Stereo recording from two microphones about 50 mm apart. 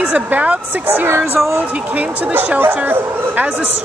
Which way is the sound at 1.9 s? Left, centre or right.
Right.